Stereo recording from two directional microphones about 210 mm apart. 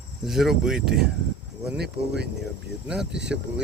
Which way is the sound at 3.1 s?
55° right (ahead or behind).